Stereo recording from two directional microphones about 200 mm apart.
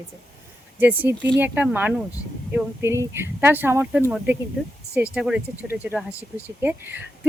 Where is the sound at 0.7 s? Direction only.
10° right (ahead or behind).